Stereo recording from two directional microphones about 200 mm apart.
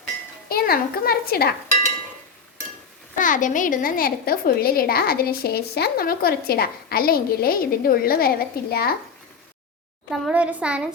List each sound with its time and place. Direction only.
0.4 s a woman's voice: 50° left (ahead or behind)
3.2 s a woman's voice: 40° left (ahead or behind)
10.1 s a child's voice: 5° right (ahead or behind)